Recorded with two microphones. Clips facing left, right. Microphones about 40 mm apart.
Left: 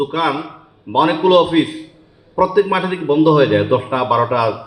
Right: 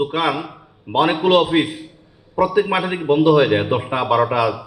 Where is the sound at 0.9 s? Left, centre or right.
Centre.